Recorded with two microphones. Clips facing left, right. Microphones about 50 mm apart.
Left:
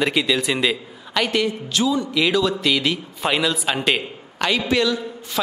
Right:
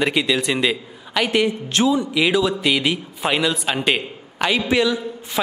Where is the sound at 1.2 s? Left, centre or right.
Centre.